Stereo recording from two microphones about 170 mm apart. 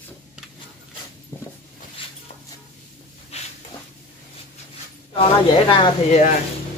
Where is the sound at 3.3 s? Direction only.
40° left (ahead or behind).